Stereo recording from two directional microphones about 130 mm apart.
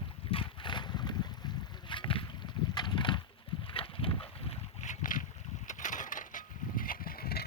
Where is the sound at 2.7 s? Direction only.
35° left (ahead or behind).